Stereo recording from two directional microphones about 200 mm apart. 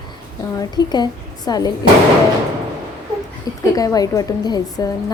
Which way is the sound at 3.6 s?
15° left (ahead or behind).